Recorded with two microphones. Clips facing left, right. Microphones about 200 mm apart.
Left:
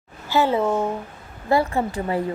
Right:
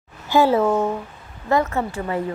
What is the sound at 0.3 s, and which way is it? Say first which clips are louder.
Speech: right 3 dB; 10° right (ahead or behind).